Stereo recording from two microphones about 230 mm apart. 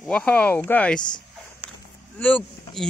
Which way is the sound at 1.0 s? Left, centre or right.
Centre.